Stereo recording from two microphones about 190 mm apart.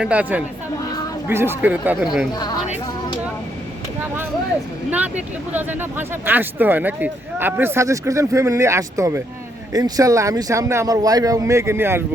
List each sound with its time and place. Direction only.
0.0 s speech: 5° right (ahead or behind)
4.9 s speech: 5° right (ahead or behind)